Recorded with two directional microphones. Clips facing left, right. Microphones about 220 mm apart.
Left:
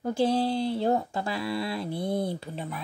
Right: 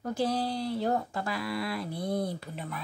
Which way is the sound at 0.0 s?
25° left (ahead or behind).